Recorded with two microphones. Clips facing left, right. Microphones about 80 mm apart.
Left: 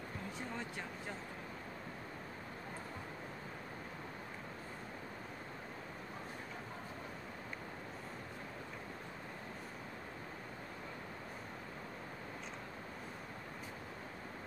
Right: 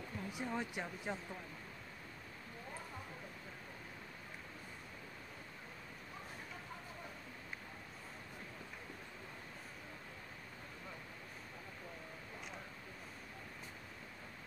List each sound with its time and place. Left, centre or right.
0.3 s speech: centre